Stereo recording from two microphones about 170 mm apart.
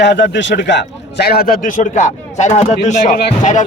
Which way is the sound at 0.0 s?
90° left.